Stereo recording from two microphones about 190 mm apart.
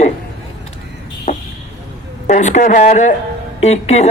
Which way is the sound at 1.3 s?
40° left (ahead or behind).